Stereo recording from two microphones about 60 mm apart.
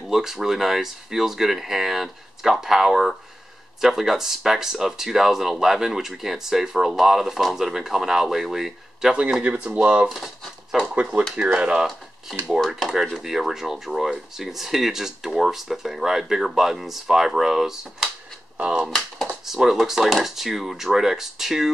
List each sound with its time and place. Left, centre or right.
0.1 s speech: centre
9.1 s speech: centre
10.0 s speech: centre
11.0 s speech: centre
12.7 s speech: centre
18.9 s speech: centre
19.4 s speech: centre